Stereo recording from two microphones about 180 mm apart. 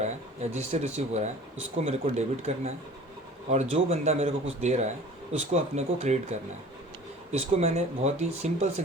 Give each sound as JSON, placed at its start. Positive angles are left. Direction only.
{"t": 0.5, "sound": "speech", "side_deg": -40}
{"t": 7.3, "sound": "speech", "side_deg": -35}